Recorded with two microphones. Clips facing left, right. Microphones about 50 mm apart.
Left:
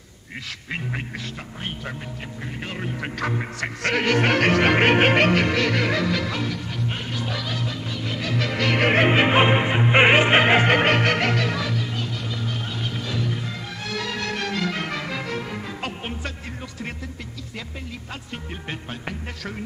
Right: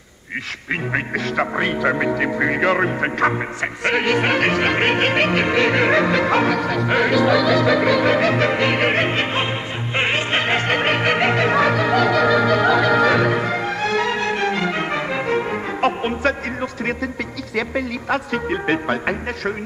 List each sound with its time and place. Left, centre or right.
1.3 s speech: right
3.0 s music: right
3.3 s music: centre
5.3 s music: centre; by 7.2 s right
7.6 s speech: right
8.9 s music: centre
10.9 s music: centre
11.1 s music: right
11.4 s music: right
13.9 s music: right
17.6 s speech: right